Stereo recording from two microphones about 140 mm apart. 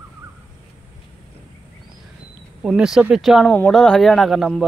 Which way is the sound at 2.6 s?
5° right (ahead or behind).